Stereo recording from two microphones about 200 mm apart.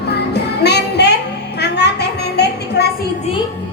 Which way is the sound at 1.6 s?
55° left (ahead or behind).